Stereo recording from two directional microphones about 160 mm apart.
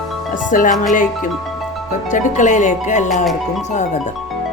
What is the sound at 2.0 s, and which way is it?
Speech, 50° left (ahead or behind).